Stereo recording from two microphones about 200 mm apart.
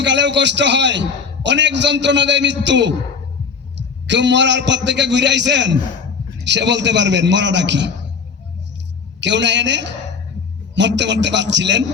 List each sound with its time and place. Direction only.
0.0 s a man's voice: 60° right (ahead or behind)
9.2 s a man's voice: 60° right (ahead or behind)